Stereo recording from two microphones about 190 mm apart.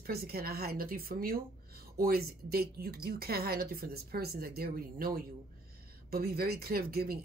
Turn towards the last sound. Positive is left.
turn(degrees=-55)  # may be behind; listen again after turning